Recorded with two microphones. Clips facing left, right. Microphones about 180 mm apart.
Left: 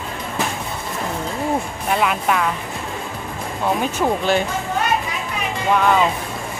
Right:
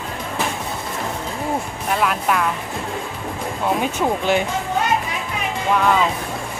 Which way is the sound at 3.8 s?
15° right (ahead or behind).